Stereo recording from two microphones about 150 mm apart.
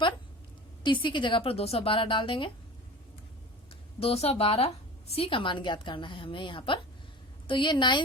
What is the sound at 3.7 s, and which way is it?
A woman's voice, 40° left (ahead or behind).